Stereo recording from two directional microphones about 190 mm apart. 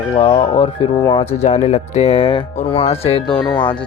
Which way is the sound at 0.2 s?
30° left (ahead or behind).